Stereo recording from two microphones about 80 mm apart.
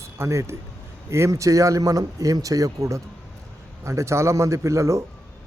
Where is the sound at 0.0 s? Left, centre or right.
Right.